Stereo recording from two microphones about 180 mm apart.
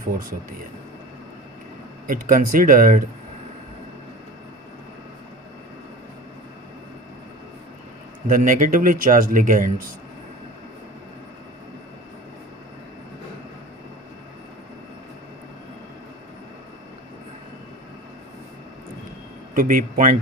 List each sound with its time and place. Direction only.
2.0 s speech: 50° right (ahead or behind)
8.3 s speech: 45° right (ahead or behind)
19.5 s speech: 50° right (ahead or behind)